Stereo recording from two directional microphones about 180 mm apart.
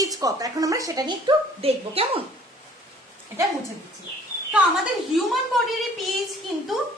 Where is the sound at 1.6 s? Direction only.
35° right (ahead or behind).